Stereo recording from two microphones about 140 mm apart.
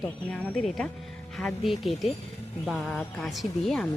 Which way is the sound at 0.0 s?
10° left (ahead or behind).